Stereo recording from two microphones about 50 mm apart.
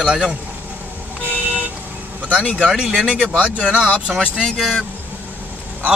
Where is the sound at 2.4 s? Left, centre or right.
Left.